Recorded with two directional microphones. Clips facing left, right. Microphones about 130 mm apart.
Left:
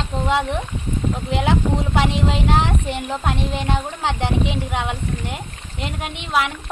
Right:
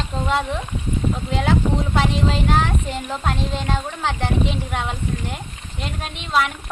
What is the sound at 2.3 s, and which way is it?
Speech, 20° left (ahead or behind).